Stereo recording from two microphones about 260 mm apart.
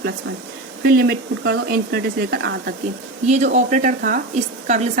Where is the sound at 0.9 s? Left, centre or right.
Right.